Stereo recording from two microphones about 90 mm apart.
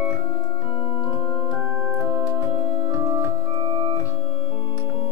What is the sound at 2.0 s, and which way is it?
Organ, 35° right (ahead or behind).